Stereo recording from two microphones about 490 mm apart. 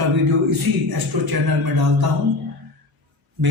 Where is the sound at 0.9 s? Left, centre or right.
Right.